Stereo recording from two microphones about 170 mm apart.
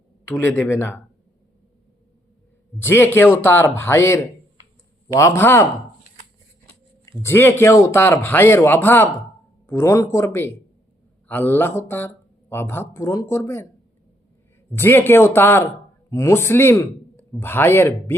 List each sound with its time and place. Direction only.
0.3 s speech: 15° left (ahead or behind)
2.7 s speech: 15° left (ahead or behind)
7.2 s speech: 15° left (ahead or behind)
14.8 s speech: 10° left (ahead or behind)